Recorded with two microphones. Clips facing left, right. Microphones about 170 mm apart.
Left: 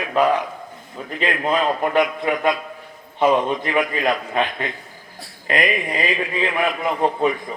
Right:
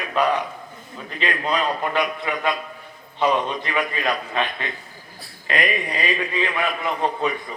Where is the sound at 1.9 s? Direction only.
50° left (ahead or behind).